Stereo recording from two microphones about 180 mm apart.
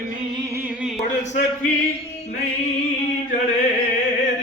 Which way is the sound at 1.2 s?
40° left (ahead or behind).